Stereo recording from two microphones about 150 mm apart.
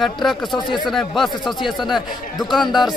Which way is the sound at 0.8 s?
Centre (ahead or behind).